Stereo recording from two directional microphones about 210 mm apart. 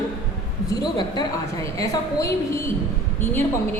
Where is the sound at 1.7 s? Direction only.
15° left (ahead or behind).